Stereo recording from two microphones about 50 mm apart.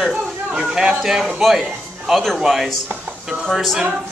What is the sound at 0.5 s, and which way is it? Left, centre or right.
Speech, centre.